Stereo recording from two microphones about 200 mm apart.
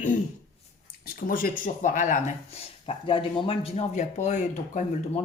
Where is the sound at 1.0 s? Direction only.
45° left (ahead or behind).